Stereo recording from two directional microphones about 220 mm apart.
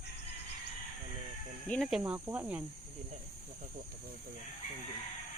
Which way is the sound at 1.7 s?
Centre (ahead or behind).